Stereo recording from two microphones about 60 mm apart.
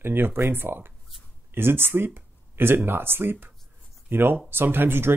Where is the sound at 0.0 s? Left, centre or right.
Right.